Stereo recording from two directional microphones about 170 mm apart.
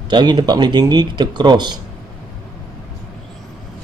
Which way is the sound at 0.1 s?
25° right (ahead or behind).